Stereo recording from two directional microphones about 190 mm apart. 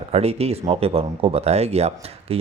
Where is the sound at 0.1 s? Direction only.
30° right (ahead or behind).